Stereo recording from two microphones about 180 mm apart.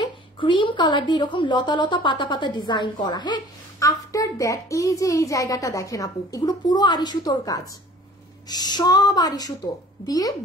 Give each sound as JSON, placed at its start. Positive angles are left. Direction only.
{"t": 0.0, "sound": "a woman's voice", "side_deg": 25}